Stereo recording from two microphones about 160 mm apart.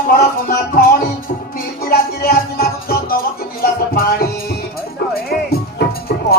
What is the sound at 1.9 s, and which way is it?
Music, 70° left (ahead or behind).